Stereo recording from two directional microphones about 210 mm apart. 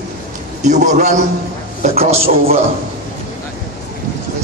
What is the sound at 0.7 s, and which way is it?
A man's voice, 35° right (ahead or behind).